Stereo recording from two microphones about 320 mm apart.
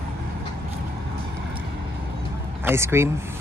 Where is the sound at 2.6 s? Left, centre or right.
Centre.